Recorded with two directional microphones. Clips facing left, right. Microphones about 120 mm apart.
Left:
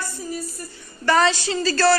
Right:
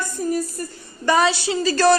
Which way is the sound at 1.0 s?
15° right (ahead or behind).